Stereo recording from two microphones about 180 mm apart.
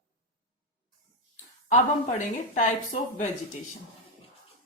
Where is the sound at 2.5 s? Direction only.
45° left (ahead or behind).